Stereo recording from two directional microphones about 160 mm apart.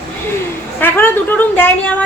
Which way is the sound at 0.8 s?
10° left (ahead or behind).